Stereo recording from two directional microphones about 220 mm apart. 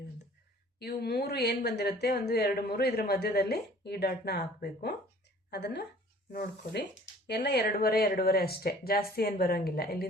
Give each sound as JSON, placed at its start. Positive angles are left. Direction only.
{"t": 0.8, "sound": "speech", "side_deg": 45}